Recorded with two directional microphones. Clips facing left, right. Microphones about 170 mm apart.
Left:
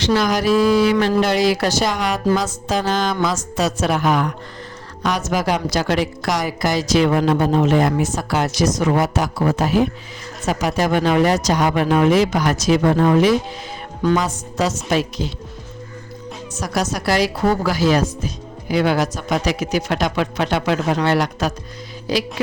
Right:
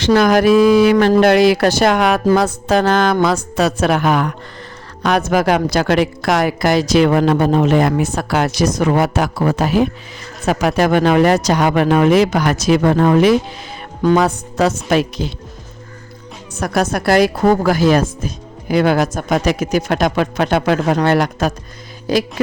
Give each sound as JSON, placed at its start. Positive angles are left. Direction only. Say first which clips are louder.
{"t": 0.0, "sound": "a woman's voice", "louder": "right 6 dB", "side_deg": -55}
{"t": 16.6, "sound": "speech", "louder": "right 5 dB", "side_deg": -55}